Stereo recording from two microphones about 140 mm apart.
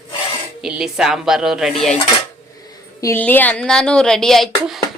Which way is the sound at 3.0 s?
20° left (ahead or behind).